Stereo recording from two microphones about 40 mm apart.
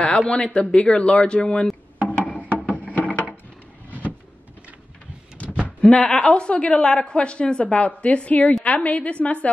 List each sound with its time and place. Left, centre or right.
0.2 s a woman's voice: left
2.0 s music: left
5.4 s a sound: left
5.8 s a woman's voice: left
7.6 s a woman's voice: left